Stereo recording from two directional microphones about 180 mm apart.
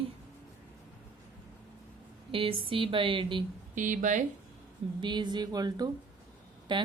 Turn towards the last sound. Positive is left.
turn(degrees=-25)  # may be behind; listen again after turning